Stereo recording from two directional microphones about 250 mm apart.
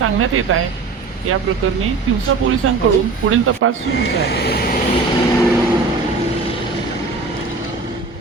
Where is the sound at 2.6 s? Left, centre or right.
Right.